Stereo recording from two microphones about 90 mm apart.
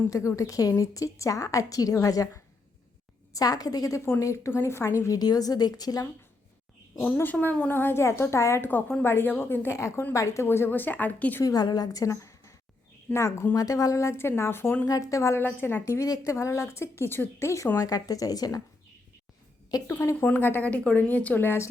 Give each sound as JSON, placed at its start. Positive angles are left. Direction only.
{"t": 0.1, "sound": "a woman's voice", "side_deg": 35}
{"t": 6.9, "sound": "a woman's voice", "side_deg": 20}
{"t": 7.7, "sound": "a woman's voice", "side_deg": 25}
{"t": 11.4, "sound": "a woman's voice", "side_deg": 50}
{"t": 15.1, "sound": "a woman's voice", "side_deg": 35}
{"t": 15.4, "sound": "a woman's voice", "side_deg": 25}
{"t": 19.7, "sound": "a woman's voice", "side_deg": 45}
{"t": 20.2, "sound": "a woman's voice", "side_deg": 20}